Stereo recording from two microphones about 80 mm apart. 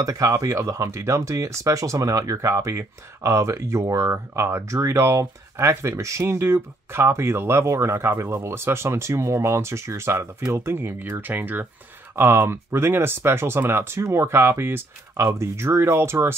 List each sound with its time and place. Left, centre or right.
0.0 s speech: right